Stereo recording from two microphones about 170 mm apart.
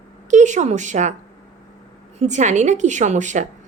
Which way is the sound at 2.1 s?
45° right (ahead or behind).